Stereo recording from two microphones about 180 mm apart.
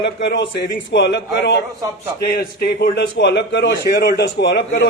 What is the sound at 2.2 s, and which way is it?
A man's voice, 60° left (ahead or behind).